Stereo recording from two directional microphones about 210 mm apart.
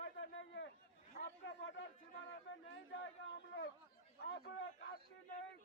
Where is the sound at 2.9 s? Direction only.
60° left (ahead or behind).